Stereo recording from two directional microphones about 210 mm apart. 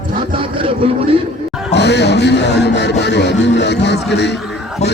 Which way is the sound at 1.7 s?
55° left (ahead or behind).